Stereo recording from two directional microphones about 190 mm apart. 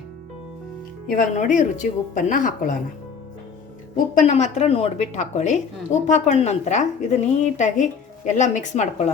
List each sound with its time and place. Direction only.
1.0 s speech: 45° left (ahead or behind)
4.2 s a woman's voice: 35° left (ahead or behind)